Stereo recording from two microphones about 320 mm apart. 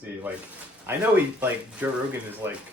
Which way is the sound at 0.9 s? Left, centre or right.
Centre.